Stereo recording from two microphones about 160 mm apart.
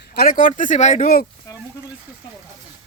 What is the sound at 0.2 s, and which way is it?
Speech, 55° left (ahead or behind).